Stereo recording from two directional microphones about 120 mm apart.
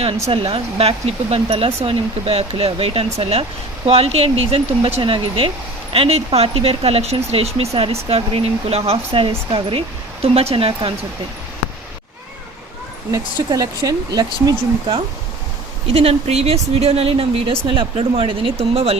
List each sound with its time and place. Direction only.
0.3 s speech: 50° right (ahead or behind)
13.1 s speech: 30° right (ahead or behind)
15.9 s speech: 55° right (ahead or behind)